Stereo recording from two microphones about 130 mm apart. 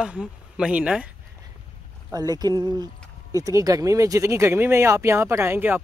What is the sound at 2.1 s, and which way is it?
Speech, 30° right (ahead or behind).